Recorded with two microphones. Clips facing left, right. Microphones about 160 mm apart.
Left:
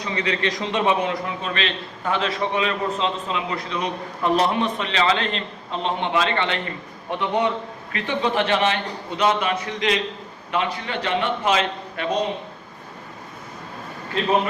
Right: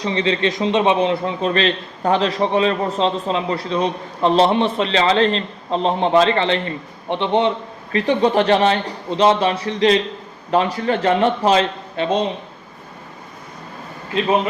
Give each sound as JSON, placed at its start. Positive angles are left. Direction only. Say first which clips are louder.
{"t": 0.0, "sound": "a man's voice", "louder": "right 5 dB", "side_deg": -30}
{"t": 7.9, "sound": "a man's voice", "louder": "right 7 dB", "side_deg": -40}